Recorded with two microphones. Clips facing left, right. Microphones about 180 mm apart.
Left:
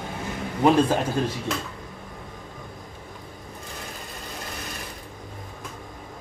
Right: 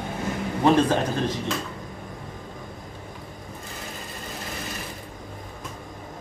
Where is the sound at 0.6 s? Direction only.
10° left (ahead or behind).